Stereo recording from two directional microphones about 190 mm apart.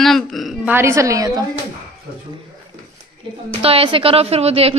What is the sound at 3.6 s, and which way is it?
A woman's voice, 30° right (ahead or behind).